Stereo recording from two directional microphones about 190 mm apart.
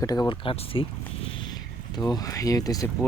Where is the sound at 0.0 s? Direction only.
20° left (ahead or behind).